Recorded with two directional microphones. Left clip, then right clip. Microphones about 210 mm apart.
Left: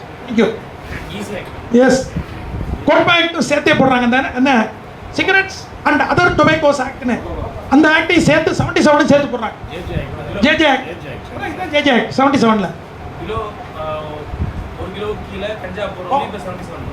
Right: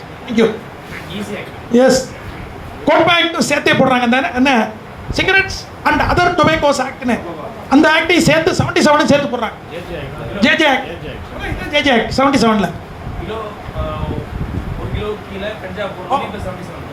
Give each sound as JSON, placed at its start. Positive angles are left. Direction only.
{"t": 1.7, "sound": "speech", "side_deg": -55}
{"t": 16.1, "sound": "speech", "side_deg": -55}